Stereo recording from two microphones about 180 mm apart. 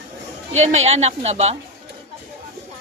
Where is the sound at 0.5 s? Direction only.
40° right (ahead or behind).